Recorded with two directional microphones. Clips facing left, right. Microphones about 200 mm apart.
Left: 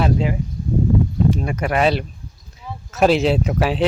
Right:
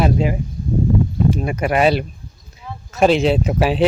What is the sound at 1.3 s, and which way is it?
Speech, 10° right (ahead or behind).